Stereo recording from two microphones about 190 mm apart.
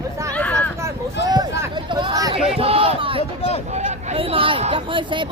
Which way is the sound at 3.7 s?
35° right (ahead or behind).